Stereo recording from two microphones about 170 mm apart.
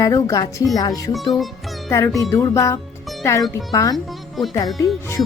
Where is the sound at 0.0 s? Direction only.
20° left (ahead or behind).